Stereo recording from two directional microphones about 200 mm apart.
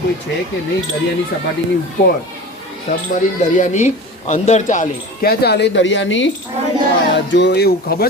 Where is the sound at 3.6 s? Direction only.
35° left (ahead or behind).